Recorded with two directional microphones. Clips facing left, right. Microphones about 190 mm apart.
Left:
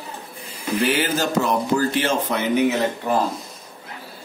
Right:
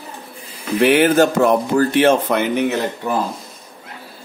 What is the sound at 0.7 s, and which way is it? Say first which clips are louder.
Speech: right 9 dB; 60° right (ahead or behind).